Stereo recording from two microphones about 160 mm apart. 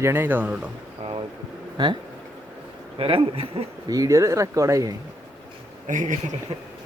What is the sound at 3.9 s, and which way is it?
Speech, 20° right (ahead or behind).